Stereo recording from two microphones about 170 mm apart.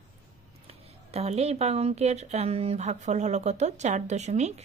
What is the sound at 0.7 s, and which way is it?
A woman's voice, 40° right (ahead or behind).